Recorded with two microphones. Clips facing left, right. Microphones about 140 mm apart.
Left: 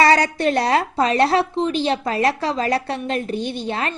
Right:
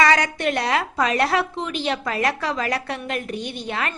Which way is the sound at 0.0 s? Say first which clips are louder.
Left 3 dB; 35° left (ahead or behind).